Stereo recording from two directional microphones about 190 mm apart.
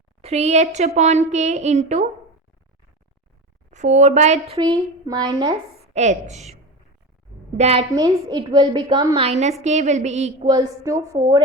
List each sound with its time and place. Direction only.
0.2 s a woman's voice: 35° right (ahead or behind)
3.7 s a woman's voice: 40° right (ahead or behind)
5.0 s a woman's voice: 20° right (ahead or behind)
5.8 s a woman's voice: 35° right (ahead or behind)
10.4 s a woman's voice: 20° right (ahead or behind)